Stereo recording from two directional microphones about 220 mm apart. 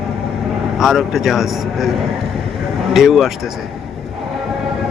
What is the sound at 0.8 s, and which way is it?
A man's voice, centre (ahead or behind).